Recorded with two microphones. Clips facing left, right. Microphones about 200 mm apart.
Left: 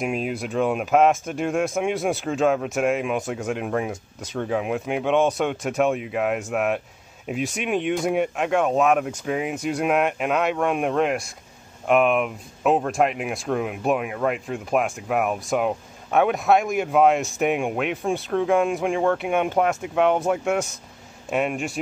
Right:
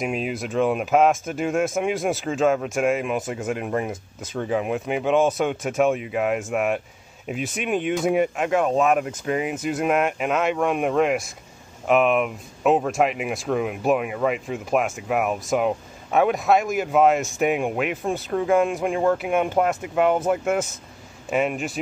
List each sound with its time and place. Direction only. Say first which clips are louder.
0.0 s speech: even; centre (ahead or behind)